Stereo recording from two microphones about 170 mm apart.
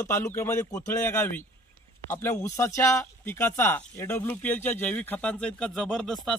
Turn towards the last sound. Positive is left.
turn(degrees=0)  # may be behind; listen again after turning